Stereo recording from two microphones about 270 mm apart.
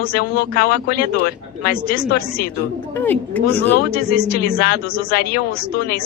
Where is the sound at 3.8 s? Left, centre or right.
Left.